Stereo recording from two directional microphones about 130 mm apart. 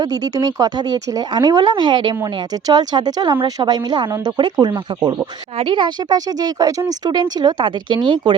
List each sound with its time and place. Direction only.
0.0 s speech: 30° right (ahead or behind)